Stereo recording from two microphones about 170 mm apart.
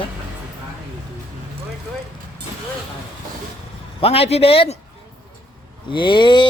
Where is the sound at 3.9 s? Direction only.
35° left (ahead or behind).